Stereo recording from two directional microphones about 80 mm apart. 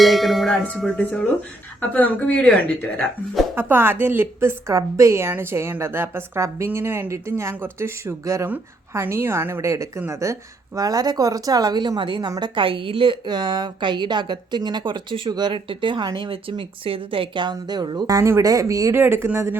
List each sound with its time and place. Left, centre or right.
0.0 s speech: centre
0.9 s a woman's voice: centre
3.5 s a woman's voice: right
10.8 s a woman's voice: right
18.9 s a woman's voice: right